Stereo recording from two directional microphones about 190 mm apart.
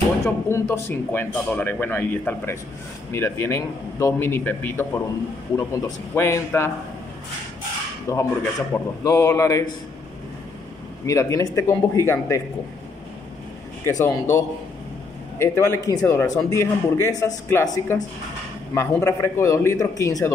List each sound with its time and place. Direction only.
0.2 s a man's voice: 15° left (ahead or behind)
8.1 s a man's voice: 15° left (ahead or behind)
11.1 s a man's voice: 15° left (ahead or behind)
13.8 s a man's voice: 15° left (ahead or behind)
15.3 s a man's voice: 15° left (ahead or behind)